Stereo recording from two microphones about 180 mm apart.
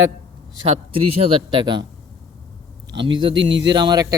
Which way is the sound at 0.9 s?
35° right (ahead or behind).